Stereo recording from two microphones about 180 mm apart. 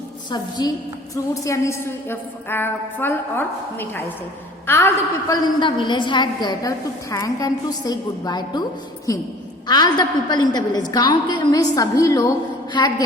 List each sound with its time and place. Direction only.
0.3 s a woman's voice: 25° left (ahead or behind)